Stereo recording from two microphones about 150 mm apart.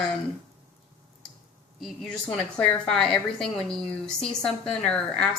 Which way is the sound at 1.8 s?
Centre (ahead or behind).